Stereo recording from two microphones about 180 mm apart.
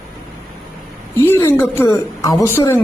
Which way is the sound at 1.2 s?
15° left (ahead or behind).